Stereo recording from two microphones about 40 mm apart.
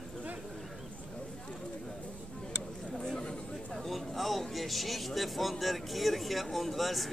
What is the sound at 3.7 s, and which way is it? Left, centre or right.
Speech, centre.